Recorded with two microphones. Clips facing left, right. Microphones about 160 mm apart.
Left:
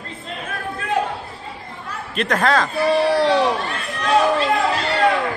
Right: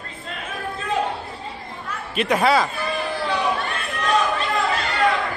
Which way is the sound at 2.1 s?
5° right (ahead or behind).